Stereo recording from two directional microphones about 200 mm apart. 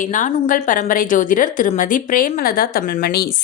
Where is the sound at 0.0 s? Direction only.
40° left (ahead or behind).